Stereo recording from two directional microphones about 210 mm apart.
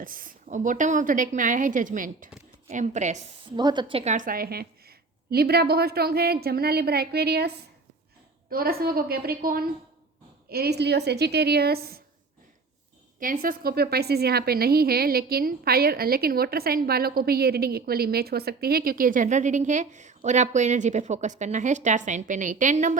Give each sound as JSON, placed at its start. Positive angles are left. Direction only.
{"t": 0.0, "sound": "a woman's voice", "side_deg": -40}
{"t": 3.5, "sound": "a woman's voice", "side_deg": -20}
{"t": 13.1, "sound": "a woman's voice", "side_deg": -40}